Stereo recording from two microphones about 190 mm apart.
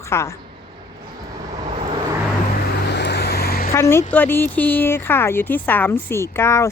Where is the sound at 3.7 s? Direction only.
15° left (ahead or behind).